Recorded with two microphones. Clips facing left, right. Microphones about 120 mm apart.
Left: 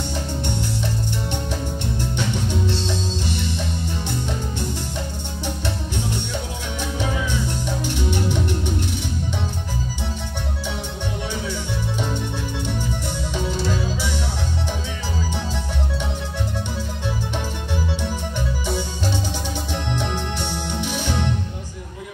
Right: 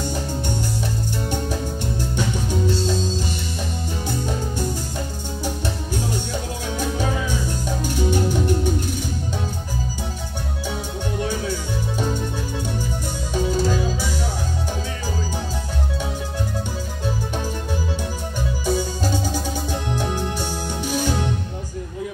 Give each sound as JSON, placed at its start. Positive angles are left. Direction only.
{"t": 1.3, "sound": "music", "side_deg": -10}
{"t": 6.8, "sound": "music", "side_deg": -45}
{"t": 13.3, "sound": "music", "side_deg": -45}
{"t": 18.7, "sound": "music", "side_deg": -45}
{"t": 20.8, "sound": "music", "side_deg": -45}